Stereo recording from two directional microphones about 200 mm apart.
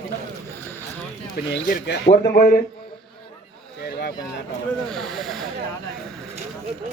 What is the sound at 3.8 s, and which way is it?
Speech, 55° left (ahead or behind).